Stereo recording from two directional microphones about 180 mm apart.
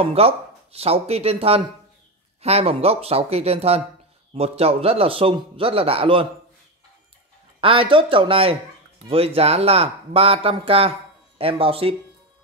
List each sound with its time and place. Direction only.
0.0 s a man's voice: 35° right (ahead or behind)
7.6 s a man's voice: 30° right (ahead or behind)